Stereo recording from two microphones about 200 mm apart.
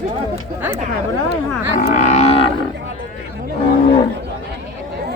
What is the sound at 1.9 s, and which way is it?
Livestock, 40° left (ahead or behind).